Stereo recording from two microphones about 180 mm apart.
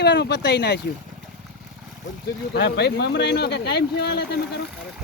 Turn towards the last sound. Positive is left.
turn(degrees=65)  # may be behind; listen again after turning